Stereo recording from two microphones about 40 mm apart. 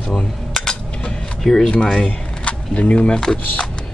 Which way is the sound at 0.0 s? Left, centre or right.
Left.